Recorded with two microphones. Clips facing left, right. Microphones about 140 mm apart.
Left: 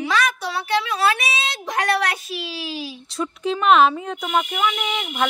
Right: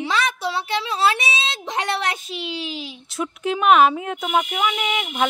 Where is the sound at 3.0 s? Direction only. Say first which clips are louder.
Even; centre (ahead or behind).